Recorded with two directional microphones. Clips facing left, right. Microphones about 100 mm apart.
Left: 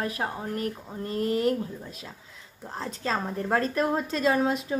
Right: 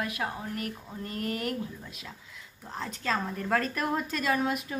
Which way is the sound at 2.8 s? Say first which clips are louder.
Left 2 dB; 30° left (ahead or behind).